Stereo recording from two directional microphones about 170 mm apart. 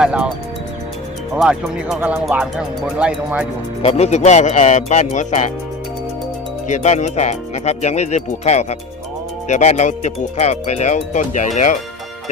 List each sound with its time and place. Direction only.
0.0 s speech: 5° right (ahead or behind)
1.4 s speech: centre (ahead or behind)
3.8 s speech: 40° left (ahead or behind)
6.7 s speech: 45° left (ahead or behind)